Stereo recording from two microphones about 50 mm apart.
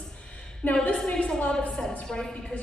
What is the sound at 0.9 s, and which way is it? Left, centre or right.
A woman's voice, centre.